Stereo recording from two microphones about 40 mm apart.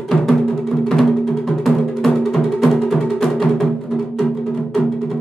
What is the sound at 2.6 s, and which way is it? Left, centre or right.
Music, centre.